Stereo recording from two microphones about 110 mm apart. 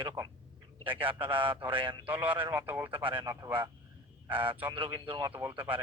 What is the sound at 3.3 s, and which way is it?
Speech, 35° right (ahead or behind).